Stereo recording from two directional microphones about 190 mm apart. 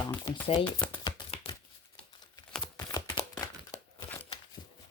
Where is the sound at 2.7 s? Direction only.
20° left (ahead or behind).